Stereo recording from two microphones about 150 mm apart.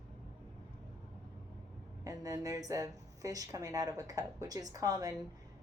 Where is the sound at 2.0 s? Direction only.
25° right (ahead or behind).